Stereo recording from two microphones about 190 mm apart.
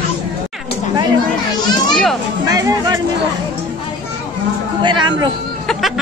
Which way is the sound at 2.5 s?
20° right (ahead or behind).